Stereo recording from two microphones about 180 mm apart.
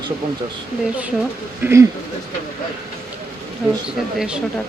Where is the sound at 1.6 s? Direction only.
15° right (ahead or behind).